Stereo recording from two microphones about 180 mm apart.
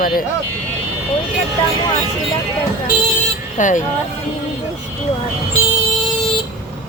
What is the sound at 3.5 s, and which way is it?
Speech, 45° left (ahead or behind).